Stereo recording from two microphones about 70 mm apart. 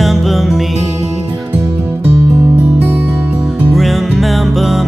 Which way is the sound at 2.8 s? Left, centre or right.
Right.